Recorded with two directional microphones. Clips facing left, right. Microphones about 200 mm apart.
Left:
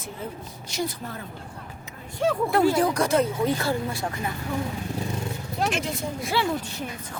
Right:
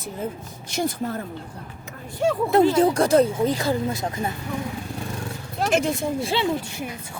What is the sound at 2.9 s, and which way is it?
Speech, 35° right (ahead or behind).